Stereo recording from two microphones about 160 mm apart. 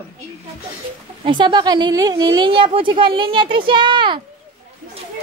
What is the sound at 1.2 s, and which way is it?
Speech, 30° right (ahead or behind).